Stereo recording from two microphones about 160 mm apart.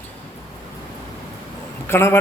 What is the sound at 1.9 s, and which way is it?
Speech, 15° left (ahead or behind).